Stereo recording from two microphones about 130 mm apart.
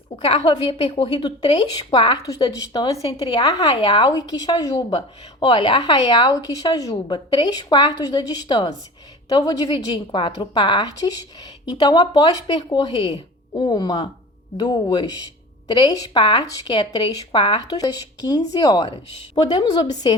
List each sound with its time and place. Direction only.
0.2 s a woman's voice: 40° left (ahead or behind)
2.2 s a woman's voice: 25° left (ahead or behind)